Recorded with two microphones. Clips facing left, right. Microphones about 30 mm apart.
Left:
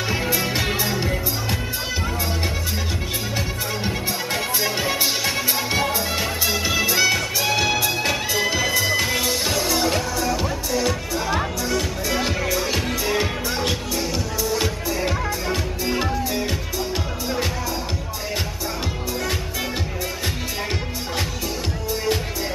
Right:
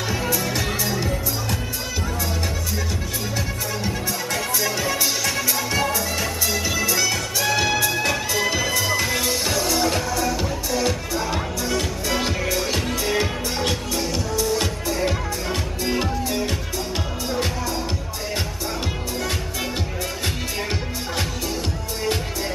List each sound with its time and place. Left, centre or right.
0.1 s music: left
3.8 s music: left; by 16.5 s centre